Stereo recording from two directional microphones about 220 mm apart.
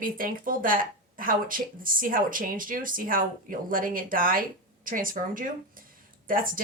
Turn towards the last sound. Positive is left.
turn(degrees=-40)  # may be behind; listen again after turning